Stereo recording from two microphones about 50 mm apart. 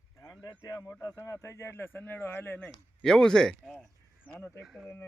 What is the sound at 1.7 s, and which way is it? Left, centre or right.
Speech, left.